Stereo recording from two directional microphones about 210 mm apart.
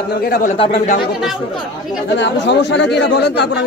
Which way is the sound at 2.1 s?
55° left (ahead or behind).